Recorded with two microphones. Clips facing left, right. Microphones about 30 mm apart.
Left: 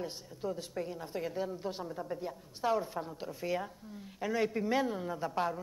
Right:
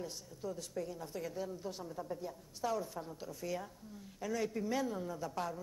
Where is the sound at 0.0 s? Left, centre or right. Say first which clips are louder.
Left 5 dB; left.